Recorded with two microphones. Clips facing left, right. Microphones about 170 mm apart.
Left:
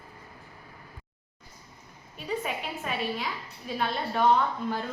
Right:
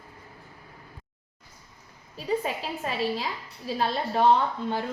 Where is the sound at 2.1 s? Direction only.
35° right (ahead or behind).